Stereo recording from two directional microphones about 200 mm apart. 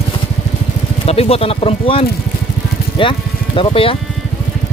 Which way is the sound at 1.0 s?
30° left (ahead or behind).